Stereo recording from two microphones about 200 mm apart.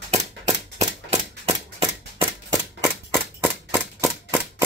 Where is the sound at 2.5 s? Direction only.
5° right (ahead or behind).